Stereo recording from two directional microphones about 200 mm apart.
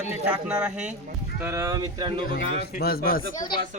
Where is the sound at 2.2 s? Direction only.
50° left (ahead or behind).